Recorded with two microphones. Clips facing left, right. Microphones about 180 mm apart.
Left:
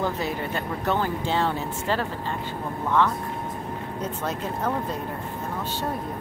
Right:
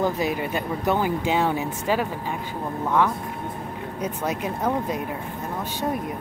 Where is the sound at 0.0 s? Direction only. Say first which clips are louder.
Right 3 dB; 15° right (ahead or behind).